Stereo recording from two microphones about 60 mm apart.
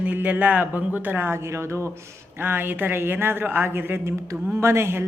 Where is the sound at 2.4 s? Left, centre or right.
Right.